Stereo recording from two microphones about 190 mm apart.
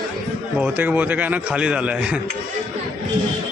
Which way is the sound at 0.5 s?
5° right (ahead or behind).